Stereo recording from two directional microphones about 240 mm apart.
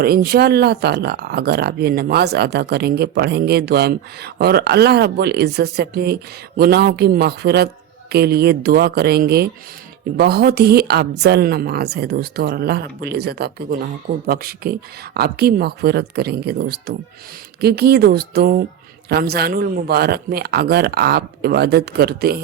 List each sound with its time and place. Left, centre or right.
0.0 s speech: right